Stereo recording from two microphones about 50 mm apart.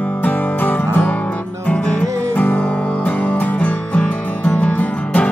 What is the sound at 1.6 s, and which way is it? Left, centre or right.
Music, left.